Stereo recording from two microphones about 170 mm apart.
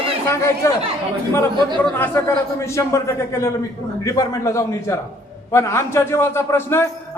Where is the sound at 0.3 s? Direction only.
15° left (ahead or behind).